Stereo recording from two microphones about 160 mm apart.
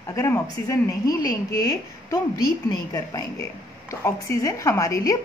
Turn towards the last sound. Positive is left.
turn(degrees=20)  # may be behind; listen again after turning